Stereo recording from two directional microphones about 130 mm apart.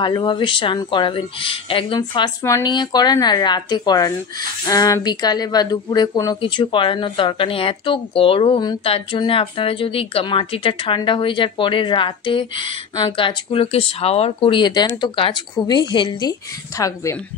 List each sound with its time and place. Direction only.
0.0 s speech: 35° left (ahead or behind)
2.4 s speech: 20° left (ahead or behind)
2.7 s speech: 35° left (ahead or behind)
6.4 s speech: 40° left (ahead or behind); by 17.2 s 25° left (ahead or behind)